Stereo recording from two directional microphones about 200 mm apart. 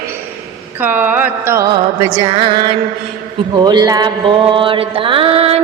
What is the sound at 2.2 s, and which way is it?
Music, 25° right (ahead or behind).